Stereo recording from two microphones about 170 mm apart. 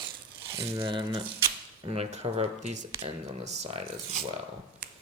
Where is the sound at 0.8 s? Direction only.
30° right (ahead or behind).